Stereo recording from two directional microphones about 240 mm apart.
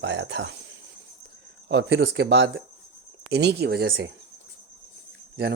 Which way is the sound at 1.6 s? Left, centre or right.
Right.